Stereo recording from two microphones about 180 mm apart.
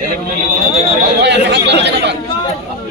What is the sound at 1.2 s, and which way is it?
Speech, 75° right (ahead or behind).